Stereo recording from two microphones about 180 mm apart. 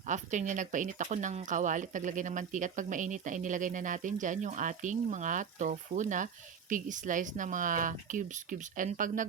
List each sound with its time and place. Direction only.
0.1 s speech: 45° right (ahead or behind)